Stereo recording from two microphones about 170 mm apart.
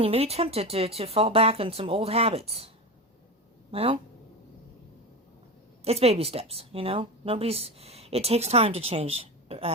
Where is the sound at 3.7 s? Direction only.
35° right (ahead or behind).